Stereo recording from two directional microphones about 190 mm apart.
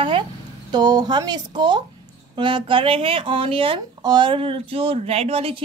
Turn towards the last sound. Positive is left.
turn(degrees=-30)  # may be behind; listen again after turning